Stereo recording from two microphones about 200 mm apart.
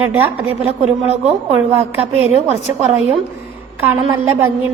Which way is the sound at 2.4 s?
35° right (ahead or behind).